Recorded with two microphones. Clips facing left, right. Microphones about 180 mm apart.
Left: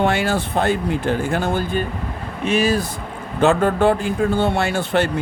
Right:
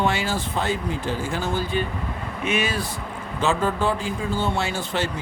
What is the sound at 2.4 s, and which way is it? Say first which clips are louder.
Speech: left 7 dB; 35° left (ahead or behind).